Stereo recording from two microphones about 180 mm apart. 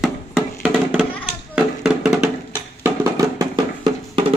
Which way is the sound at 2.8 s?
20° right (ahead or behind).